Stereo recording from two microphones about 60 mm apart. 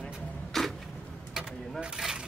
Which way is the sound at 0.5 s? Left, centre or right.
Centre.